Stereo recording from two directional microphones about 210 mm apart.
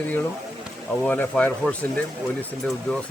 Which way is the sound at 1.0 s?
10° left (ahead or behind).